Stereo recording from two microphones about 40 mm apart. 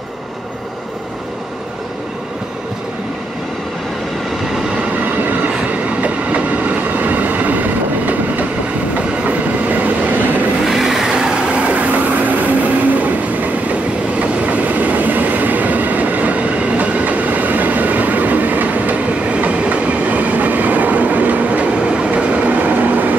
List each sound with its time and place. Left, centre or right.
5.7 s train: right
9.3 s train: right
10.6 s vehicle: centre
11.1 s train: centre; by 12.7 s right
14.2 s train: right
21.9 s train: right